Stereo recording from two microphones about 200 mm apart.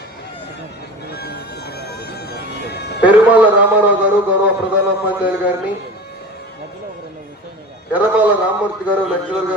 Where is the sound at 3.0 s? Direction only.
10° right (ahead or behind).